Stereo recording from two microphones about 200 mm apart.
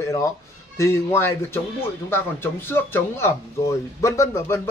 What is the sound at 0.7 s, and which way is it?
Speech, 10° left (ahead or behind).